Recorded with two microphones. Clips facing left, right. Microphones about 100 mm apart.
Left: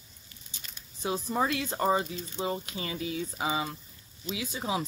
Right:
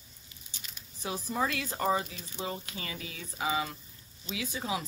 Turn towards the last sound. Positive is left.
turn(degrees=25)  # may be behind; listen again after turning